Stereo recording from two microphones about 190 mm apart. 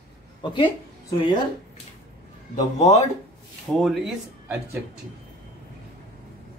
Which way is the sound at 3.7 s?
Centre (ahead or behind).